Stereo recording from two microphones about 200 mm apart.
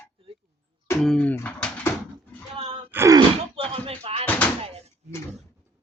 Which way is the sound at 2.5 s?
30° right (ahead or behind).